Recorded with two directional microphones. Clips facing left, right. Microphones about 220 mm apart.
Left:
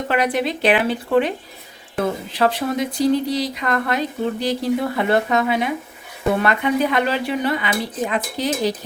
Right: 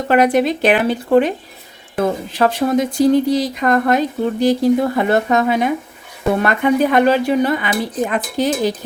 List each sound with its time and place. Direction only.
0.1 s speech: 45° right (ahead or behind)
2.3 s speech: 45° right (ahead or behind)